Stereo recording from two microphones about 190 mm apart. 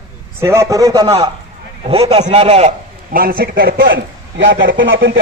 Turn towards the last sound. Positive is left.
turn(degrees=-80)